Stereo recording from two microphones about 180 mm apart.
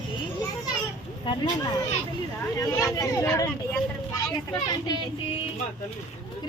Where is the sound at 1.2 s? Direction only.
25° left (ahead or behind).